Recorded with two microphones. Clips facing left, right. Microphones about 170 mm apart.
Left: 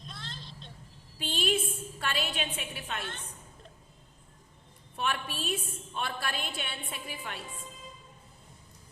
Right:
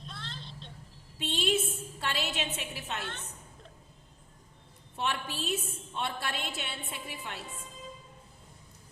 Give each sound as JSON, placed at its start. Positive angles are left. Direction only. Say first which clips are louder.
{"t": 1.2, "sound": "a woman's voice", "louder": "right 1 dB", "side_deg": -25}
{"t": 4.9, "sound": "a woman's voice", "louder": "even", "side_deg": -25}